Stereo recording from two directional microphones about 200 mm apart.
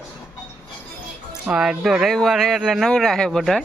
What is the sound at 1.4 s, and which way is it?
Speech, 5° right (ahead or behind).